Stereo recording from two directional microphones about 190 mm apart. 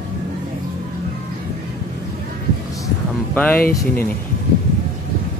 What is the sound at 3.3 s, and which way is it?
Speech, 10° left (ahead or behind).